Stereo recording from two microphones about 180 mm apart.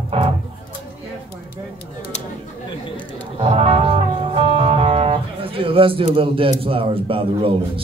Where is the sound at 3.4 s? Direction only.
30° right (ahead or behind).